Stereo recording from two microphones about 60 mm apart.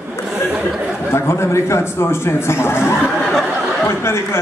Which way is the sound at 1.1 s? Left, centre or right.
Left.